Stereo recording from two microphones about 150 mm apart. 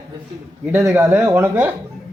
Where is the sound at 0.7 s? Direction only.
20° right (ahead or behind).